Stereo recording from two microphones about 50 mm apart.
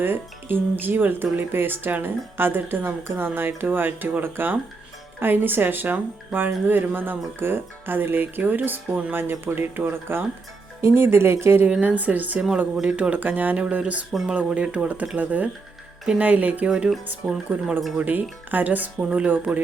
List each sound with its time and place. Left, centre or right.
0.0 s speech: right
11.8 s speech: right
16.6 s speech: centre
17.5 s speech: right